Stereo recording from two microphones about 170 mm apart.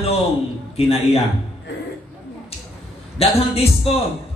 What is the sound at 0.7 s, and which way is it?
Speech, 35° left (ahead or behind).